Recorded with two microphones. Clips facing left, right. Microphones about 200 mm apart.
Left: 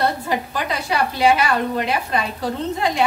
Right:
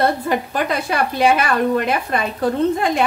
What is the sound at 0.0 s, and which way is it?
A woman's voice, 55° right (ahead or behind).